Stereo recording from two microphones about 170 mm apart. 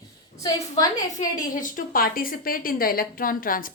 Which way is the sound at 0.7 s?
20° left (ahead or behind).